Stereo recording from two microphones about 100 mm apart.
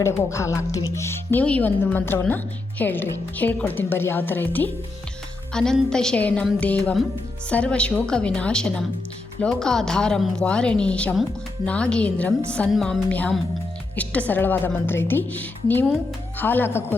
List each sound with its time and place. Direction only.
0.0 s a woman's voice: 30° left (ahead or behind)
5.5 s a woman's voice: 5° left (ahead or behind)